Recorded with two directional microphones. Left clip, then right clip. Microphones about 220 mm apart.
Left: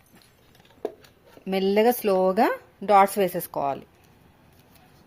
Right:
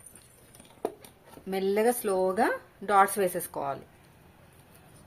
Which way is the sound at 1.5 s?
35° left (ahead or behind).